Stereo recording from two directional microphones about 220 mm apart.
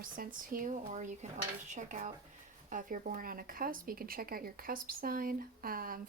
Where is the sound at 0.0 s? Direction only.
40° right (ahead or behind).